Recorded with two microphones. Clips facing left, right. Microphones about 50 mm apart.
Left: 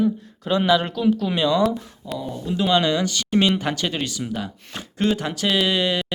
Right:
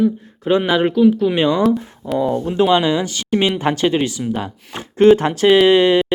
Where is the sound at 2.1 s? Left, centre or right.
Right.